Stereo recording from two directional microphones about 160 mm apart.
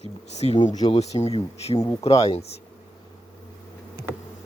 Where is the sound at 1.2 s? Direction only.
40° left (ahead or behind).